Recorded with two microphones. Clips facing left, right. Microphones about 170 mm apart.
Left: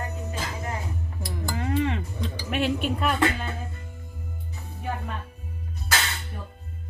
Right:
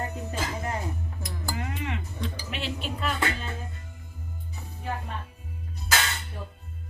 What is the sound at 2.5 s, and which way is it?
Speech, 55° left (ahead or behind).